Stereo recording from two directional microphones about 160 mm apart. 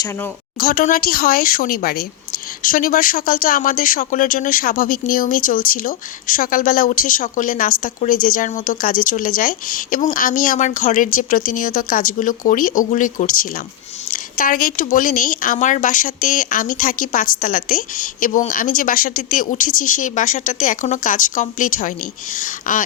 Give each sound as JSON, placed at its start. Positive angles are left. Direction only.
{"t": 0.6, "sound": "speech", "side_deg": 65}